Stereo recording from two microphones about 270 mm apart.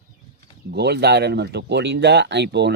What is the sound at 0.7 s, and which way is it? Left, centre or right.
Speech, right.